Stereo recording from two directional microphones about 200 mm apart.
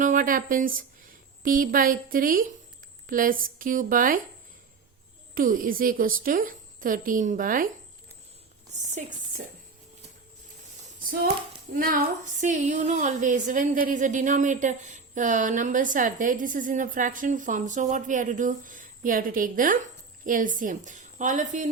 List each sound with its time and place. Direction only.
0.0 s a woman's voice: 40° right (ahead or behind)
5.3 s a woman's voice: 45° right (ahead or behind)
9.0 s a woman's voice: 40° right (ahead or behind)
11.7 s speech: 45° right (ahead or behind)